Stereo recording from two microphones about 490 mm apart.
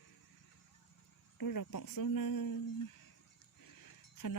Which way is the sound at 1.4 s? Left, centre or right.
Left.